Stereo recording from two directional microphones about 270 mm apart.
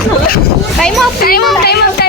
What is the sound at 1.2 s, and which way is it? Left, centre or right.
Speech, left.